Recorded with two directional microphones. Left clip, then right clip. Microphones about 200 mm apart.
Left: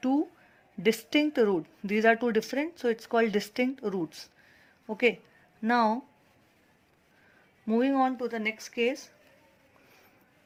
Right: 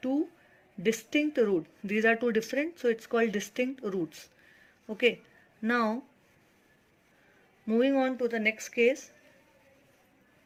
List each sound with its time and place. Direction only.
0.8 s speech: 25° left (ahead or behind)
7.7 s speech: 15° left (ahead or behind)